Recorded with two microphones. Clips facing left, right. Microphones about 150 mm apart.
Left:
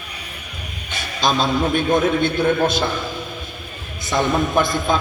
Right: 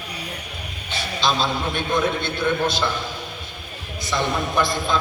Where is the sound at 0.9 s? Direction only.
45° left (ahead or behind).